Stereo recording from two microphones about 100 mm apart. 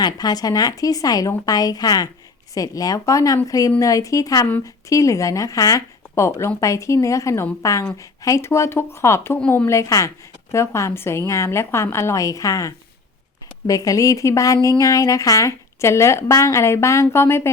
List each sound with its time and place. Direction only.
0.0 s a woman's voice: 40° left (ahead or behind); by 17.5 s 25° left (ahead or behind)